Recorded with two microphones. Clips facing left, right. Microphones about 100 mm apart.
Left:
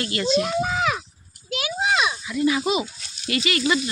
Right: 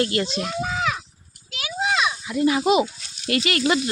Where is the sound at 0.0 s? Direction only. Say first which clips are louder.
Right 5 dB; 45° right (ahead or behind).